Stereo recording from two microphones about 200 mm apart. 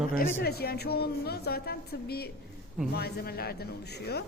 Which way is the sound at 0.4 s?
50° left (ahead or behind).